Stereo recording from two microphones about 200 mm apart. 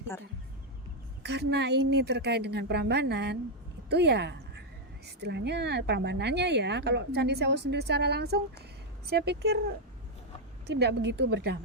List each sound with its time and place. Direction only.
1.2 s speech: 55° right (ahead or behind)
10.8 s speech: 55° right (ahead or behind)